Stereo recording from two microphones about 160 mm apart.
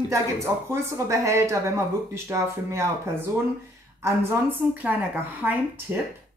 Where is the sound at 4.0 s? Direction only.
15° right (ahead or behind).